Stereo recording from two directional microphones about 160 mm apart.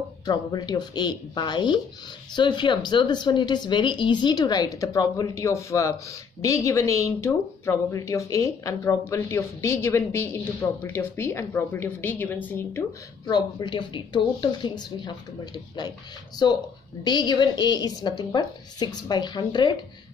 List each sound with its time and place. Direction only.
0.2 s a woman's voice: 25° left (ahead or behind)
13.3 s speech: 30° left (ahead or behind)